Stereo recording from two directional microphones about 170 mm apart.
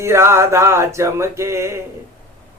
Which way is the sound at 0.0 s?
15° right (ahead or behind).